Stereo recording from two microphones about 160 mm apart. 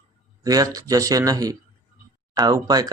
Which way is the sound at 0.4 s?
20° right (ahead or behind).